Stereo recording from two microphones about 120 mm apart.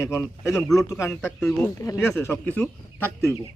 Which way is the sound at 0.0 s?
25° left (ahead or behind).